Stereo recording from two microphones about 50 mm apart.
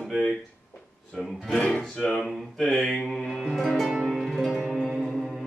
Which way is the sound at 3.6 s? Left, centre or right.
Centre.